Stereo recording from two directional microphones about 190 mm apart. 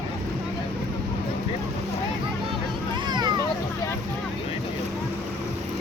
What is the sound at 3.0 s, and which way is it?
Vehicle, 20° right (ahead or behind).